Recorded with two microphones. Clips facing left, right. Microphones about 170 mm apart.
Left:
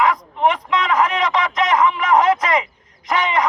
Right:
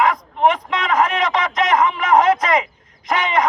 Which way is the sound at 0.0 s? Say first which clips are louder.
Right 1 dB; 45° right (ahead or behind).